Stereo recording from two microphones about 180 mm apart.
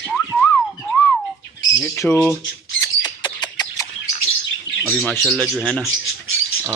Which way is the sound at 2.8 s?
25° left (ahead or behind).